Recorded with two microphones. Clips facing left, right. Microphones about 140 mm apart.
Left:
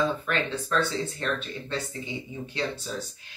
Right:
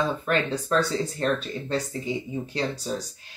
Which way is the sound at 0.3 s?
40° right (ahead or behind).